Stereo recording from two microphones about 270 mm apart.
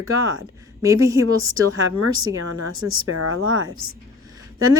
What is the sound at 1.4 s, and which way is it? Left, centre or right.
A woman's voice, right.